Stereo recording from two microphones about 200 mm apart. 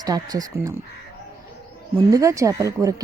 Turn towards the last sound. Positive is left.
turn(degrees=-15)  # may be behind; listen again after turning